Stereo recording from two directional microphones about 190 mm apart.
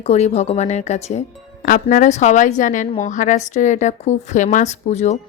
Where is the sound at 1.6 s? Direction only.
45° left (ahead or behind).